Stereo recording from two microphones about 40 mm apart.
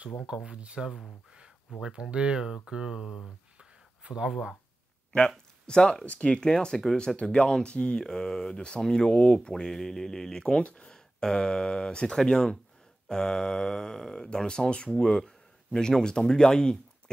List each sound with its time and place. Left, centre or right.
0.5 s speech: right
0.7 s speech: centre; by 2.3 s right
2.3 s speech: centre
3.5 s a sound: right
5.1 s speech: left
7.1 s speech: centre
7.5 s speech: left
8.0 s speech: centre
9.5 s speech: centre
10.6 s speech: left
10.9 s speech: centre